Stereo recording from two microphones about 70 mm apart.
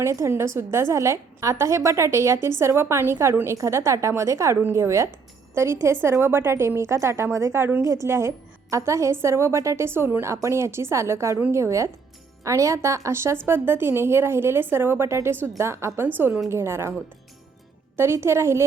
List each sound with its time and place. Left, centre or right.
0.0 s a woman's voice: right
16.0 s a woman's voice: right
17.9 s a woman's voice: right